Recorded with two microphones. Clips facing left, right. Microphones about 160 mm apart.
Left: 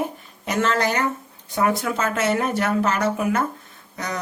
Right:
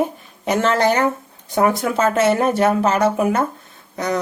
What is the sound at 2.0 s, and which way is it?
Speech, 30° right (ahead or behind).